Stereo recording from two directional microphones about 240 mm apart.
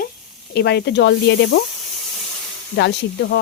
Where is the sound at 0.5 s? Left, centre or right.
Left.